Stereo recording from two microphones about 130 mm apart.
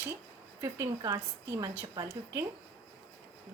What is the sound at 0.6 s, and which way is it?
Speech, 25° right (ahead or behind).